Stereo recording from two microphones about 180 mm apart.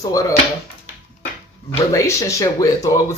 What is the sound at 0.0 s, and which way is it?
Speech, 20° left (ahead or behind).